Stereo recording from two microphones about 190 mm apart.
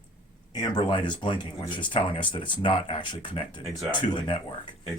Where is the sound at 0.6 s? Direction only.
25° left (ahead or behind).